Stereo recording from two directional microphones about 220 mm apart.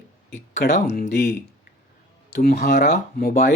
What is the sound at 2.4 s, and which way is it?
Speech, 50° left (ahead or behind).